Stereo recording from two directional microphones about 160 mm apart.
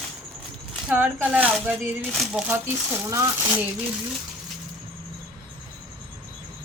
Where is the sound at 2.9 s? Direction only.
20° right (ahead or behind).